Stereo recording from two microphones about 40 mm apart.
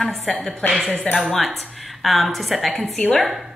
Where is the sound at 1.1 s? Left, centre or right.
Left.